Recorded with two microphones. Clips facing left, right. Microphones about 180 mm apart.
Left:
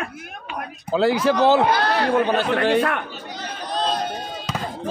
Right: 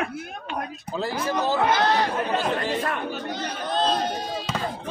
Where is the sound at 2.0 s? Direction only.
70° left (ahead or behind).